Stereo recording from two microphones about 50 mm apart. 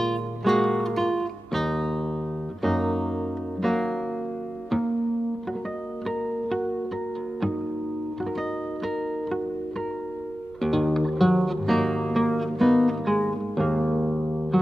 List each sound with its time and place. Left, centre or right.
0.0 s music: centre
3.6 s guitar: centre
10.6 s music: centre